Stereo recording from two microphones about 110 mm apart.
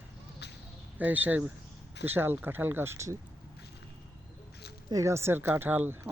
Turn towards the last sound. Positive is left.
turn(degrees=-15)  # may be behind; listen again after turning